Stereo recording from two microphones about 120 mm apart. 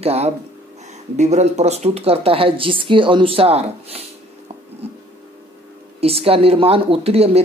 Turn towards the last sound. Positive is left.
turn(degrees=-55)  # may be behind; listen again after turning